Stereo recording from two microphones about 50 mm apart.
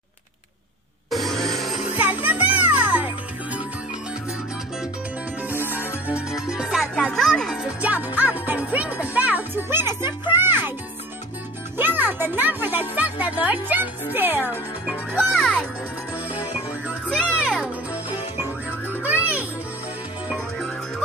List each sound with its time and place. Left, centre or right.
1.1 s music: centre
2.0 s music: right
5.6 s music: left
6.4 s music: centre
7.0 s a child's voice: centre
7.8 s music: right
9.6 s music: right
11.7 s a child's voice: right
15.1 s a child's voice: centre
19.0 s music: right